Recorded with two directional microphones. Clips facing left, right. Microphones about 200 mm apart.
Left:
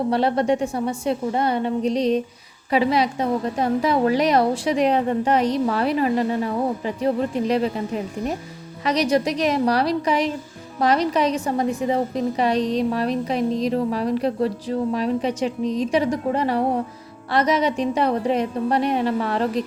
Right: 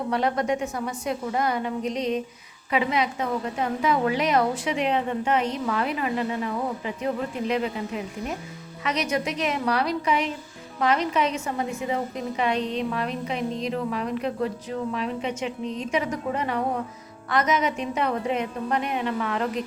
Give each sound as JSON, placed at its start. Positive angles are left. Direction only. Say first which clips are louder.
{"t": 0.1, "sound": "a woman's voice", "louder": "left 3 dB", "side_deg": 30}